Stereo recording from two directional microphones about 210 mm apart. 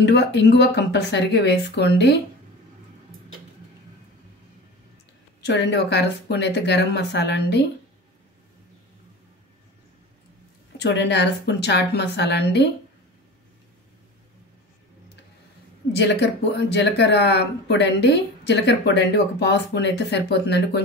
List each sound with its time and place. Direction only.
0.0 s speech: 55° left (ahead or behind)
5.4 s speech: 55° left (ahead or behind)
10.8 s speech: 55° left (ahead or behind)
16.0 s speech: 55° left (ahead or behind)